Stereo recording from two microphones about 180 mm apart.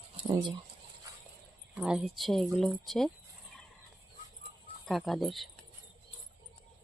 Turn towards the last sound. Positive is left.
turn(degrees=0)  # may be behind; listen again after turning